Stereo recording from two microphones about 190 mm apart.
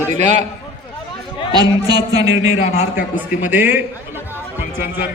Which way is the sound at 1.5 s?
20° right (ahead or behind).